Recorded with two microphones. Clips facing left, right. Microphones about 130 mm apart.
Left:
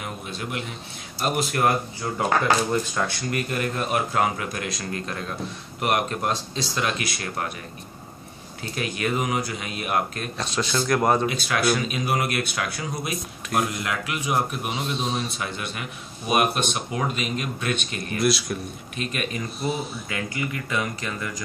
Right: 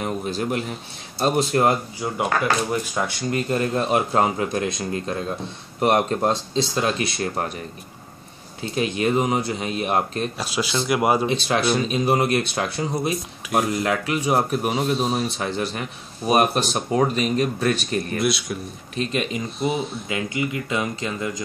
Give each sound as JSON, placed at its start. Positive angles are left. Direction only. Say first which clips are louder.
{"t": 0.0, "sound": "speech", "louder": "right 8 dB", "side_deg": -40}
{"t": 2.7, "sound": "speech", "louder": "even", "side_deg": -15}
{"t": 3.3, "sound": "speech", "louder": "right 4 dB", "side_deg": -25}
{"t": 8.7, "sound": "speech", "louder": "right 5 dB", "side_deg": -25}
{"t": 10.3, "sound": "speech", "louder": "right 1 dB", "side_deg": -5}
{"t": 11.2, "sound": "speech", "louder": "right 2 dB", "side_deg": -30}
{"t": 18.2, "sound": "speech", "louder": "even", "side_deg": 0}
{"t": 18.9, "sound": "speech", "louder": "right 5 dB", "side_deg": -25}